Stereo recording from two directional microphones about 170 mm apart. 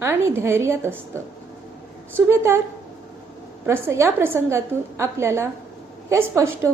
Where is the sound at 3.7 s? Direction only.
15° right (ahead or behind).